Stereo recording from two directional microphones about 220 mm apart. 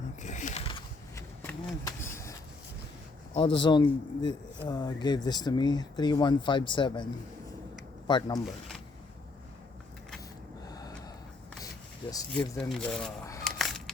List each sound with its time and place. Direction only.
0.2 s a sound: 35° left (ahead or behind); by 2.3 s 10° left (ahead or behind)
3.3 s speech: 20° left (ahead or behind)
8.4 s speech: centre (ahead or behind)
10.7 s gasp: 15° left (ahead or behind)
12.3 s speech: 5° left (ahead or behind)
13.4 s a sound: centre (ahead or behind)